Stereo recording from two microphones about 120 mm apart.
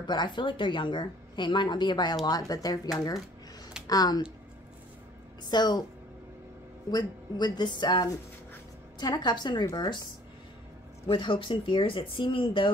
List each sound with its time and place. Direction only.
0.0 s a woman's voice: 35° left (ahead or behind)
5.4 s a woman's voice: 35° left (ahead or behind)
6.9 s a woman's voice: 35° left (ahead or behind)
11.1 s speech: 45° left (ahead or behind)